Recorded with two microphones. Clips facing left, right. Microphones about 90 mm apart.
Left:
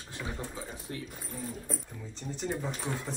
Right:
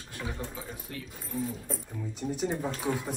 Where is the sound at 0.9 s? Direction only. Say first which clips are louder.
Left 3 dB; 25° left (ahead or behind).